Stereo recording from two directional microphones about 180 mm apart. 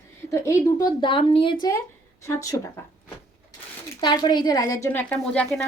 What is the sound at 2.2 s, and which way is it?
Speech, 15° left (ahead or behind).